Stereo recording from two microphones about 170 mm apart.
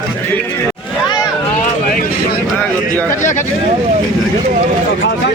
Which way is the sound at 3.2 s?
45° left (ahead or behind).